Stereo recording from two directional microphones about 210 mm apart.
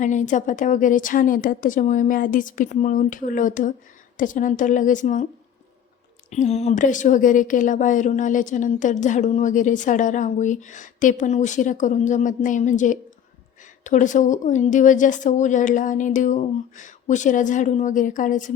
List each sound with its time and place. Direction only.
0.0 s speech: 35° left (ahead or behind)
6.3 s speech: 30° left (ahead or behind)